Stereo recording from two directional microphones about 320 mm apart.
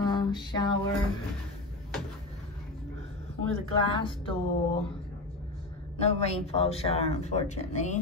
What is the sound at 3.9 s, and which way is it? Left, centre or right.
Speech, centre.